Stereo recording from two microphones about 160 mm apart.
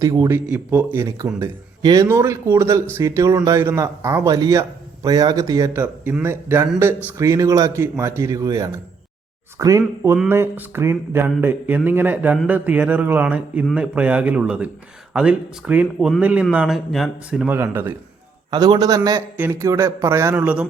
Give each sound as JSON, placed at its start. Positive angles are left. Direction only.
{"t": 0.0, "sound": "a man's voice", "side_deg": -25}
{"t": 18.5, "sound": "a man's voice", "side_deg": -25}